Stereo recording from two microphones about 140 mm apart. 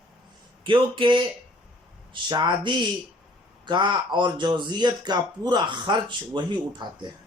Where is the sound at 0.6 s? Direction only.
35° right (ahead or behind).